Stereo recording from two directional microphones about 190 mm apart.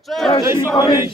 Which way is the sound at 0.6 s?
15° left (ahead or behind).